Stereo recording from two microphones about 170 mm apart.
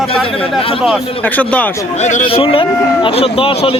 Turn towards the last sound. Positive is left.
turn(degrees=35)  # may be behind; listen again after turning